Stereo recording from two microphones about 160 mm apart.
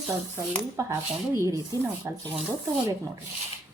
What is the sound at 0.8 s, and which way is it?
Speech, 20° right (ahead or behind).